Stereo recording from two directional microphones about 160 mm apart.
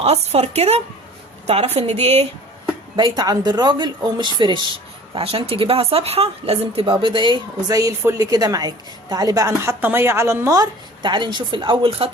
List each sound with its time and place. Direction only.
0.0 s a woman's voice: 40° right (ahead or behind)
2.9 s speech: 25° right (ahead or behind)